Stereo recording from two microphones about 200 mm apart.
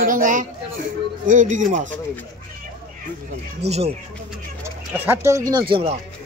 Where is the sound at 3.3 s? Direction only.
30° right (ahead or behind).